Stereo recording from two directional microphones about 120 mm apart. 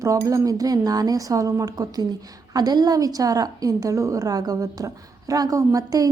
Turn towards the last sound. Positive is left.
turn(degrees=-30)  # may be behind; listen again after turning